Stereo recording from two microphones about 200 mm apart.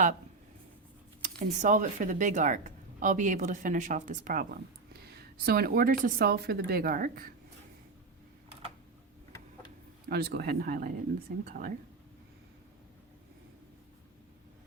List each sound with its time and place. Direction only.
1.2 s speech: 40° right (ahead or behind)
10.1 s speech: 50° right (ahead or behind)